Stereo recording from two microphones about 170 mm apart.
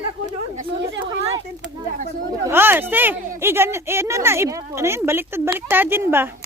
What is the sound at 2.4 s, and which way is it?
Speech, 15° right (ahead or behind).